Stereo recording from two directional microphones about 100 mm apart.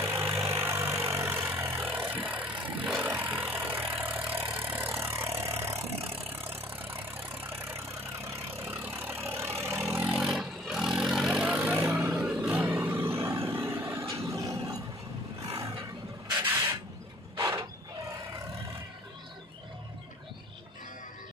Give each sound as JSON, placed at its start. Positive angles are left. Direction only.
{"t": 0.0, "sound": "vehicle", "side_deg": -25}
{"t": 10.2, "sound": "vehicle", "side_deg": -5}
{"t": 17.3, "sound": "mechanisms", "side_deg": -30}